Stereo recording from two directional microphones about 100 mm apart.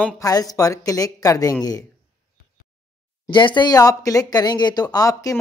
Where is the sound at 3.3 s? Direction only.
50° left (ahead or behind); by 5.4 s 35° left (ahead or behind).